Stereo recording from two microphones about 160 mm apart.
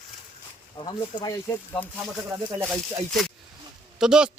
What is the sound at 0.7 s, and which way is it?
Speech, 30° left (ahead or behind).